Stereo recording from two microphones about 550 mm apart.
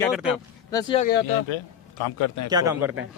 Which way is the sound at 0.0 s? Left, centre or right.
Centre.